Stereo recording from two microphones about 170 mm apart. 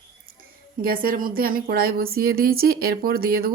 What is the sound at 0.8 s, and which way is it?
Speech, 60° right (ahead or behind).